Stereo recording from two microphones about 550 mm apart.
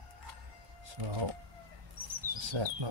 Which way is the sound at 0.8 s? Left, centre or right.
Right.